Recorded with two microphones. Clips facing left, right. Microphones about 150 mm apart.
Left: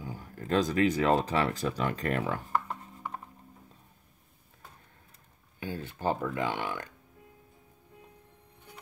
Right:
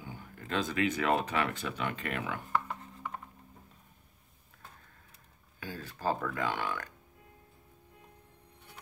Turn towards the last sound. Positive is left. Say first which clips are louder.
# left 2 dB
turn(degrees=20)  # may be behind; listen again after turning